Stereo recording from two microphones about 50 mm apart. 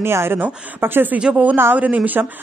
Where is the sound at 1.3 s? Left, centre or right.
Right.